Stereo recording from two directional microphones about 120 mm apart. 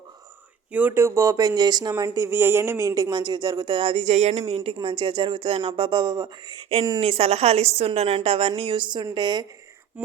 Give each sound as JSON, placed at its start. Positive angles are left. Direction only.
{"t": 0.7, "sound": "a man's voice", "side_deg": -15}
{"t": 7.0, "sound": "a woman's voice", "side_deg": -60}